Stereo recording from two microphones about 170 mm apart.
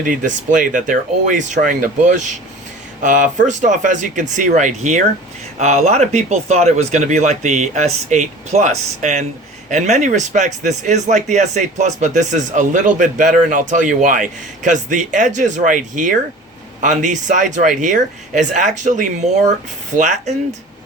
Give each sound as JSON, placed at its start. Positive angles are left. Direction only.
{"t": 0.0, "sound": "speech", "side_deg": -50}